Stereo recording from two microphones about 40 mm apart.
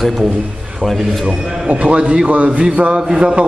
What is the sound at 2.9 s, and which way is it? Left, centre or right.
Speech, centre.